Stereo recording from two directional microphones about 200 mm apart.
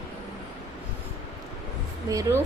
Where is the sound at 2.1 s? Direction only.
15° right (ahead or behind).